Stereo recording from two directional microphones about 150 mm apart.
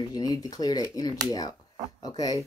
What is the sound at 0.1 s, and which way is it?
Speech, 25° left (ahead or behind).